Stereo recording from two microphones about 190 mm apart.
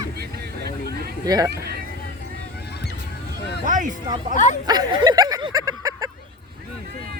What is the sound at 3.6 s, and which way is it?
Speech, 45° right (ahead or behind).